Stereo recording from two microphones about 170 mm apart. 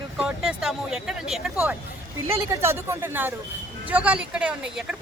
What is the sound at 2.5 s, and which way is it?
Speech, 15° right (ahead or behind).